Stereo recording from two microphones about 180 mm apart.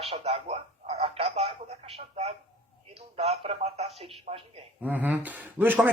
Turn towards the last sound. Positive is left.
turn(degrees=-10)  # may be behind; listen again after turning